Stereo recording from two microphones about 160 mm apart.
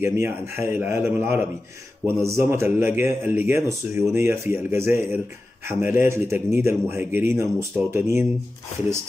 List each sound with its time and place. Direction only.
0.0 s speech: 15° right (ahead or behind)